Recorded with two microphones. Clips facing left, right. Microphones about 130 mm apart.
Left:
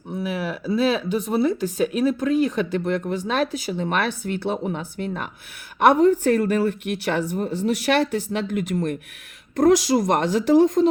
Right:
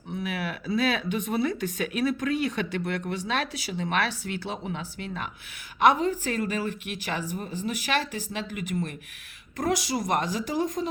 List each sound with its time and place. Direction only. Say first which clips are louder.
0.1 s speech: left 5 dB; 35° left (ahead or behind)
5.8 s speech: left 6 dB; 60° left (ahead or behind)
8.5 s speech: left 7 dB; 45° left (ahead or behind)
9.6 s speech: left 11 dB; 65° left (ahead or behind)
10.0 s speech: left 7 dB; 55° left (ahead or behind)